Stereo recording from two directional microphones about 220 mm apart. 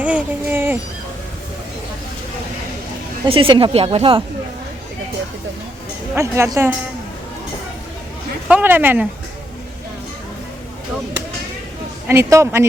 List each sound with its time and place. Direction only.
0.0 s speech: 5° right (ahead or behind)
3.2 s speech: 25° right (ahead or behind)
6.1 s a woman's voice: 10° right (ahead or behind)
8.4 s a woman's voice: 10° right (ahead or behind)
12.0 s a woman's voice: 10° right (ahead or behind)